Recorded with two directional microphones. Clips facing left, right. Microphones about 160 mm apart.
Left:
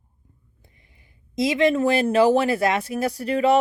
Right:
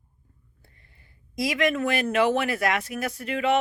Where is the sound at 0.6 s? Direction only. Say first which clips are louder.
Left 1 dB; 15° left (ahead or behind); by 3.5 s 35° left (ahead or behind).